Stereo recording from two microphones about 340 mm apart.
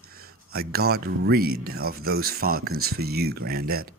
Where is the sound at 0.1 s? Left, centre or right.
Right.